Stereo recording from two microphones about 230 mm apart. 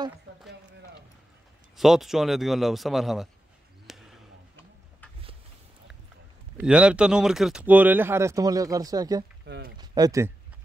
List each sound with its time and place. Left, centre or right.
1.8 s a man's voice: centre
3.8 s a sound: centre
6.6 s speech: centre
9.5 s speech: right
9.8 s speech: centre